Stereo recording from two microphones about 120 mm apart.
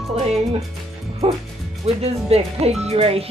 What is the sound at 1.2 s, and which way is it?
Speech, 60° right (ahead or behind).